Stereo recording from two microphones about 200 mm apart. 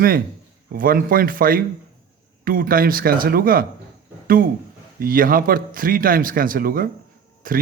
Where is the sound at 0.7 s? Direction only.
45° right (ahead or behind).